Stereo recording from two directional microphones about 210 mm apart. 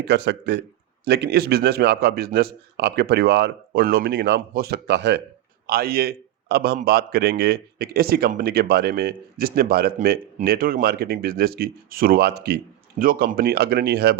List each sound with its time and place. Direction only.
0.0 s a man's voice: 55° right (ahead or behind)